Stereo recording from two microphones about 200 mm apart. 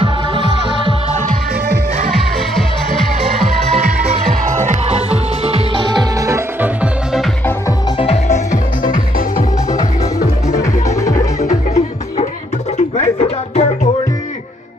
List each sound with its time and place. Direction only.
0.0 s music: 25° right (ahead or behind)
3.7 s music: 35° right (ahead or behind); by 7.2 s 5° right (ahead or behind)
8.0 s music: 35° left (ahead or behind)
10.6 s music: 15° left (ahead or behind)
11.4 s music: 35° left (ahead or behind)